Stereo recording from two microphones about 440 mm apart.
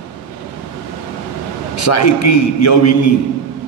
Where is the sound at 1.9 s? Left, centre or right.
Left.